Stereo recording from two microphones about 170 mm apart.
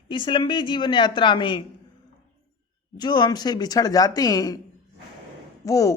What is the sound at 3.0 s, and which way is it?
A woman's voice, 25° left (ahead or behind).